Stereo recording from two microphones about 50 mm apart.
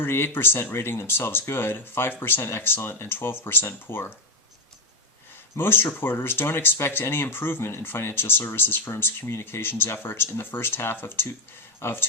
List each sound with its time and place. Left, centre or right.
0.0 s speech: left
5.5 s speech: left